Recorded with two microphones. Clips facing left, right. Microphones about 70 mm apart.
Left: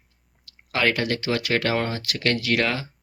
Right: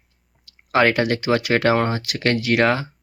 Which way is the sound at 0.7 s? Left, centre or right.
Right.